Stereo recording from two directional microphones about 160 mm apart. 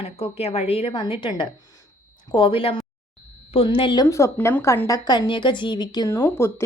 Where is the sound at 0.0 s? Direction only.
40° left (ahead or behind).